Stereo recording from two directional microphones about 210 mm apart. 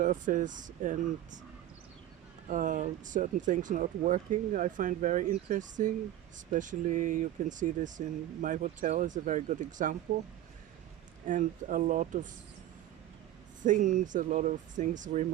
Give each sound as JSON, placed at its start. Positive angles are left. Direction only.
{"t": 0.0, "sound": "speech", "side_deg": -40}
{"t": 2.5, "sound": "speech", "side_deg": -40}
{"t": 11.3, "sound": "speech", "side_deg": -35}
{"t": 13.6, "sound": "speech", "side_deg": -35}